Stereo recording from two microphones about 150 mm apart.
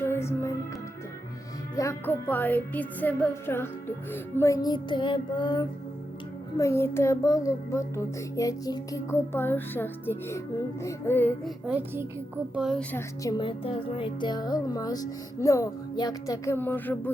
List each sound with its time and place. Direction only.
0.0 s music: 15° left (ahead or behind)
1.7 s music: 20° left (ahead or behind)
6.6 s music: 15° left (ahead or behind)
11.4 s child singing: 5° right (ahead or behind)
12.9 s speech: 20° left (ahead or behind)